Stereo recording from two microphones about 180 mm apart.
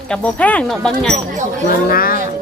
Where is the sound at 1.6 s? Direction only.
55° left (ahead or behind).